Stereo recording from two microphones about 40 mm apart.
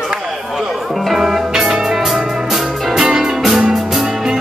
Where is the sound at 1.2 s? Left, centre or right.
Centre.